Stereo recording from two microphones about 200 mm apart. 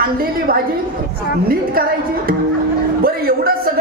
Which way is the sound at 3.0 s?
50° right (ahead or behind).